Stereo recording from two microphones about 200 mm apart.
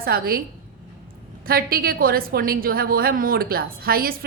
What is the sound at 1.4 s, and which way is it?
A woman's voice, 50° right (ahead or behind).